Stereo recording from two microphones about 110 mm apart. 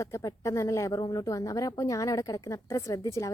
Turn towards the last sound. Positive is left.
turn(degrees=30)  # may be behind; listen again after turning